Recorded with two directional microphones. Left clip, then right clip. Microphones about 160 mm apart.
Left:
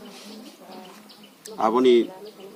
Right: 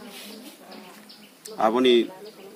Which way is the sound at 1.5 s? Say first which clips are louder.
Left 1 dB; 30° right (ahead or behind).